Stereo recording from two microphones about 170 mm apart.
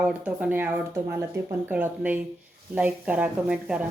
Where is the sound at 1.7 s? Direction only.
10° right (ahead or behind).